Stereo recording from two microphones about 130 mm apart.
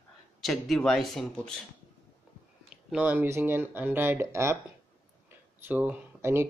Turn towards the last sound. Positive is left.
turn(degrees=-20)  # may be behind; listen again after turning